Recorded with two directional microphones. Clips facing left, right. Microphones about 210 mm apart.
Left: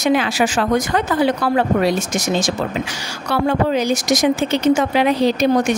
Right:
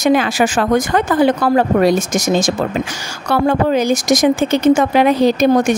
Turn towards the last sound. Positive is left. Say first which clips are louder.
# right 3 dB
turn(degrees=-45)  # may be behind; listen again after turning